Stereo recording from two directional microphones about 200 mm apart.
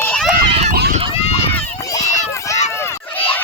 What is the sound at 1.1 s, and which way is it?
Run, 30° left (ahead or behind).